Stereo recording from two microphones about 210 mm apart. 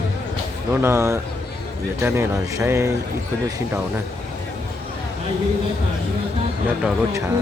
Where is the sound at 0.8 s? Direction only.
15° right (ahead or behind).